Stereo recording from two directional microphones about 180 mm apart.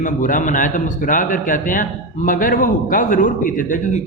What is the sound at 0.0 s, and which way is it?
A man's voice, 45° left (ahead or behind).